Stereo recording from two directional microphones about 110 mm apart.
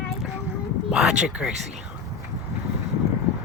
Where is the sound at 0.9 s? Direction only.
5° right (ahead or behind).